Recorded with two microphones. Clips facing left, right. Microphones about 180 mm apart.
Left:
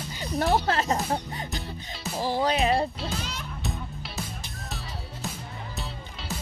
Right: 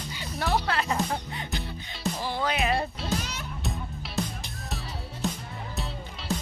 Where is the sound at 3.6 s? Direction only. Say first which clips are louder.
Even; centre (ahead or behind).